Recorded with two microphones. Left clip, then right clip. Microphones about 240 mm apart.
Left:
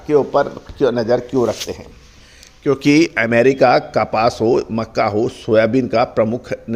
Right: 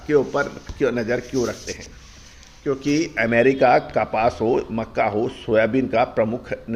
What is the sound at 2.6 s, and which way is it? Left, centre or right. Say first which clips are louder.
A man's voice: left 8 dB; left.